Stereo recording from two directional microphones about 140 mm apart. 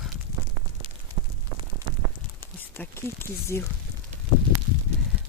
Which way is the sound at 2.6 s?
15° left (ahead or behind).